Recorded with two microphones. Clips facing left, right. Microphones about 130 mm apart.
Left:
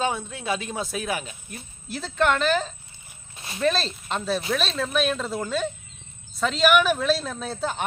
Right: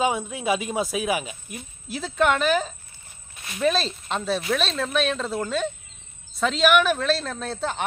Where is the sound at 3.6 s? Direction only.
Centre (ahead or behind).